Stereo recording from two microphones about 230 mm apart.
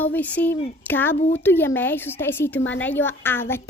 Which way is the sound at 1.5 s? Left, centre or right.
Centre.